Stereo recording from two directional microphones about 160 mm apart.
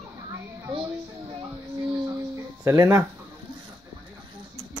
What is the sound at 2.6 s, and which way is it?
Speech, 20° right (ahead or behind).